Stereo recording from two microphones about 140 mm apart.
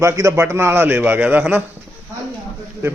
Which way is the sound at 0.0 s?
20° right (ahead or behind).